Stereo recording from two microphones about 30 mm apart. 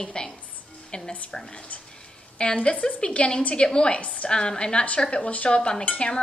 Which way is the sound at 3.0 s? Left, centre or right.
Left.